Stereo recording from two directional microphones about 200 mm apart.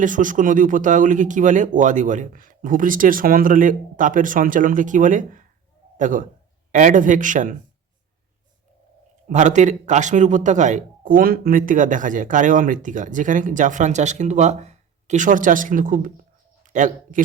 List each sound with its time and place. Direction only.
0.0 s speech: 40° right (ahead or behind)
9.3 s speech: 35° right (ahead or behind)